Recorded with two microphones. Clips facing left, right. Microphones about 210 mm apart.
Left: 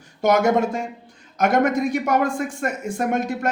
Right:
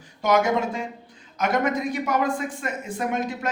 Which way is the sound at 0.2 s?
45° left (ahead or behind).